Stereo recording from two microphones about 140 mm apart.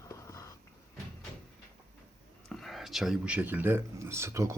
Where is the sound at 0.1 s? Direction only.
20° left (ahead or behind).